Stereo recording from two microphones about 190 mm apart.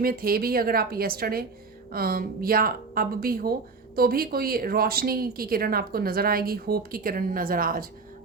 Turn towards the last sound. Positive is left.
turn(degrees=-50)  # may be behind; listen again after turning